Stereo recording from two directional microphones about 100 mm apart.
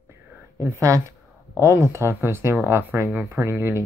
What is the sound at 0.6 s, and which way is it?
Speech, 30° right (ahead or behind).